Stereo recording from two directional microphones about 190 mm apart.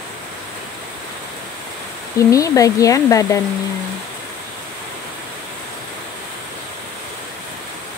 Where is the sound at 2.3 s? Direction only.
15° left (ahead or behind).